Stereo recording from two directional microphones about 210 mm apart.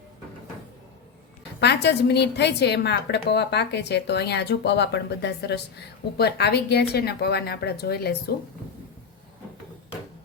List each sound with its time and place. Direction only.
1.6 s a woman's voice: 55° left (ahead or behind)